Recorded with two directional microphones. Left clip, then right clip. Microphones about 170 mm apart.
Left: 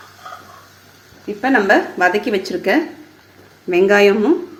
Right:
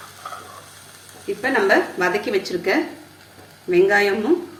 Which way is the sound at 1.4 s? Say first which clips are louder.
Left 4 dB; 55° left (ahead or behind).